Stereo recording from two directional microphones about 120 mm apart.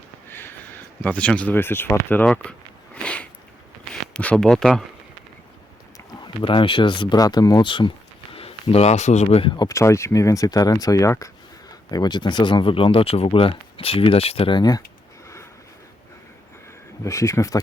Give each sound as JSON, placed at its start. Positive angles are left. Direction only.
{"t": 0.3, "sound": "a sound", "side_deg": 20}
{"t": 1.0, "sound": "speech", "side_deg": 10}
{"t": 6.1, "sound": "speech", "side_deg": 40}
{"t": 9.5, "sound": "speech", "side_deg": 35}
{"t": 9.7, "sound": "speech", "side_deg": 25}
{"t": 17.0, "sound": "speech", "side_deg": 25}